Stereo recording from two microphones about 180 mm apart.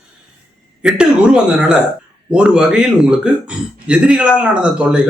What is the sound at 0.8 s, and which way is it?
Speech, 5° right (ahead or behind).